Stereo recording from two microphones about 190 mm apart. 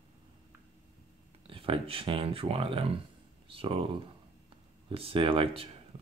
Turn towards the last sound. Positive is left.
turn(degrees=-30)  # may be behind; listen again after turning